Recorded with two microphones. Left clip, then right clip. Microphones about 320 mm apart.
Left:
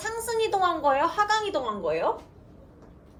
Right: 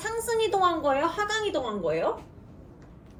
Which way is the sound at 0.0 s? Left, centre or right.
Centre.